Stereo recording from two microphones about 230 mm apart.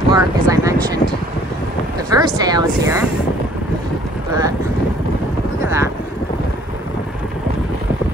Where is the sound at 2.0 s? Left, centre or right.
Centre.